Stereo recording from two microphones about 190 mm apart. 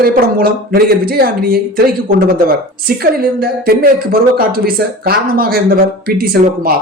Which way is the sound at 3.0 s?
50° right (ahead or behind).